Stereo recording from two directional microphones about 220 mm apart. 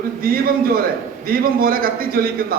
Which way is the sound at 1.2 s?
40° right (ahead or behind).